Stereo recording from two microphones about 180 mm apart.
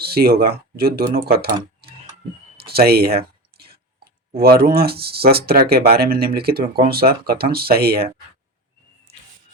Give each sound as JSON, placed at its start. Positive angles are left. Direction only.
{"t": 0.0, "sound": "speech", "side_deg": -60}